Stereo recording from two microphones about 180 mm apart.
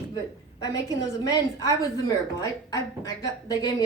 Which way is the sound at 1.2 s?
20° left (ahead or behind).